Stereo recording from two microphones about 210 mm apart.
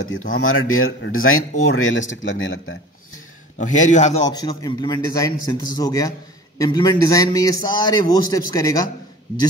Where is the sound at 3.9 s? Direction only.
35° left (ahead or behind).